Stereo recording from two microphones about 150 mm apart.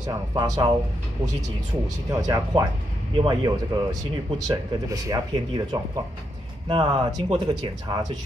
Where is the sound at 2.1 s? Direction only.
25° right (ahead or behind).